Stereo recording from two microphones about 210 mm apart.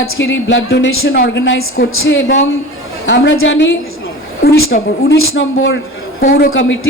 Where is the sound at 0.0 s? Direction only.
65° left (ahead or behind).